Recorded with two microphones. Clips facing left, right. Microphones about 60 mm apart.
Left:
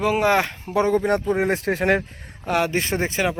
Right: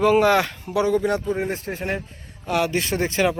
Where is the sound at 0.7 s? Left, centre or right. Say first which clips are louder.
Left 1 dB; left.